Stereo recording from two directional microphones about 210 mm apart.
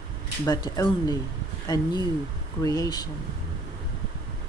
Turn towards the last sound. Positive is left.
turn(degrees=20)  # may be behind; listen again after turning